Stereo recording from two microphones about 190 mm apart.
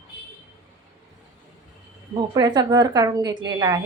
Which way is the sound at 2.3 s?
20° right (ahead or behind).